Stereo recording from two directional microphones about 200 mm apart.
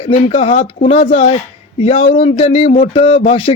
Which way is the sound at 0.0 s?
30° left (ahead or behind).